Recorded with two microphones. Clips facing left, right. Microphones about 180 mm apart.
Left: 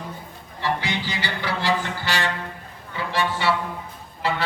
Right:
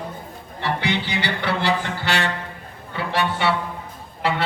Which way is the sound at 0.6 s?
65° right (ahead or behind).